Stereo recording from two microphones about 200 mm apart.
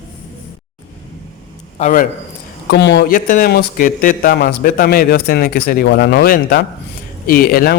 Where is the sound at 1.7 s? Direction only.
40° left (ahead or behind).